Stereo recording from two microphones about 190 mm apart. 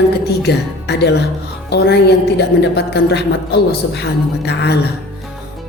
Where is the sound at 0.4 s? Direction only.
60° left (ahead or behind).